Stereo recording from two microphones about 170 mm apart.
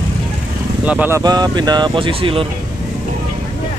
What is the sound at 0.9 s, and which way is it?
Speech, 10° right (ahead or behind).